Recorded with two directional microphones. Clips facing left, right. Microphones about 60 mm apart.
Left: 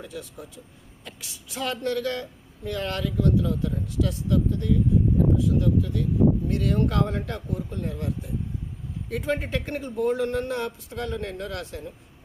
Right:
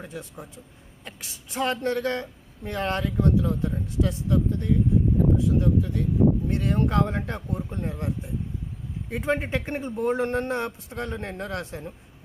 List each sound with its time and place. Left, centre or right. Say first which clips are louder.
0.0 s speech: even; right